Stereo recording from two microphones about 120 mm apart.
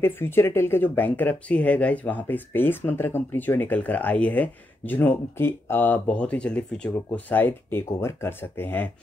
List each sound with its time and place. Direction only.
0.0 s speech: 20° left (ahead or behind)